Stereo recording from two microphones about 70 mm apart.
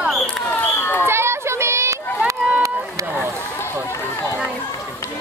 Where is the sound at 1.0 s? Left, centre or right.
Right.